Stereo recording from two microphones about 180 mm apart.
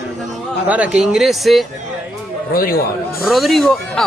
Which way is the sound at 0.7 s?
5° right (ahead or behind).